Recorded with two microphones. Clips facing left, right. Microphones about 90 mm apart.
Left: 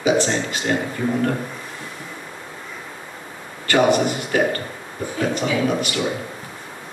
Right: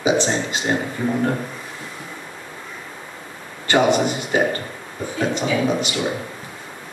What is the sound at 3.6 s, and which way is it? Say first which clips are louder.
Speech: even; 20° right (ahead or behind).